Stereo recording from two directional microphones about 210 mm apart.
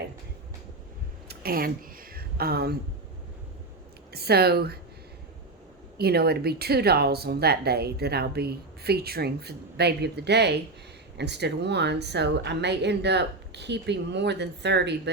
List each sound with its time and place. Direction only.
1.3 s a sound: 45° right (ahead or behind)
4.1 s speech: 50° right (ahead or behind)
6.0 s speech: 50° right (ahead or behind)